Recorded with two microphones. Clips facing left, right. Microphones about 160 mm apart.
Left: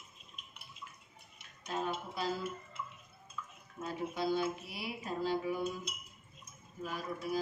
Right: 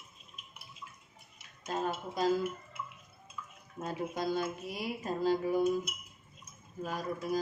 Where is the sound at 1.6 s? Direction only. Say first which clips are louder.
Right 3 dB; 40° right (ahead or behind).